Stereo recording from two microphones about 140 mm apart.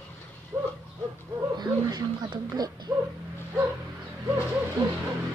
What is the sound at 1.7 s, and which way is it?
Speech, 30° right (ahead or behind).